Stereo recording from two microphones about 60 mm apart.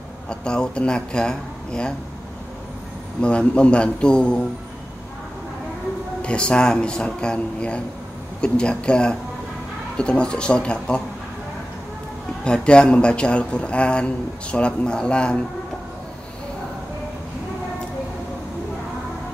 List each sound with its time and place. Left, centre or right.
0.3 s speech: centre
3.2 s speech: centre
6.2 s speech: centre
12.4 s speech: centre